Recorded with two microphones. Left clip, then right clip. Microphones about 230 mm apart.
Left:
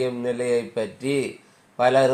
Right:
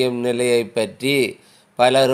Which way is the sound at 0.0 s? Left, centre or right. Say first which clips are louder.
Right 5 dB; right.